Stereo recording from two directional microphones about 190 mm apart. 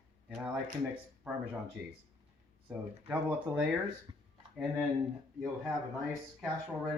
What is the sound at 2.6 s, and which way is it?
Speech, 5° right (ahead or behind).